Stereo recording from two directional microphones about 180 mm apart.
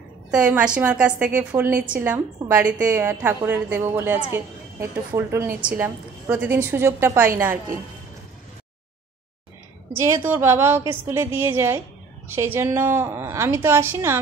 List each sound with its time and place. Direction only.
0.3 s a woman's voice: 5° right (ahead or behind)
9.9 s a woman's voice: 15° right (ahead or behind)